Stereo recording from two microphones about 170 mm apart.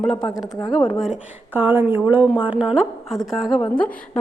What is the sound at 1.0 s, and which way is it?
A woman's voice, 5° right (ahead or behind).